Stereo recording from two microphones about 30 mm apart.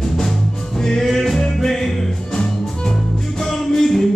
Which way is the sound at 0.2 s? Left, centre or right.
Centre.